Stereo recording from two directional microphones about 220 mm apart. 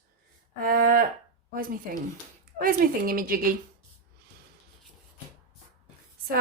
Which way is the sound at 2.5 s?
40° right (ahead or behind).